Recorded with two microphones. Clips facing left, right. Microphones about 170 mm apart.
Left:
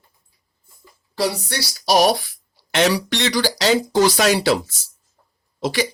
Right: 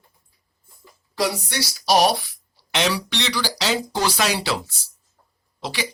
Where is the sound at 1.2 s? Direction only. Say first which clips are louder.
Left 1 dB; 35° left (ahead or behind).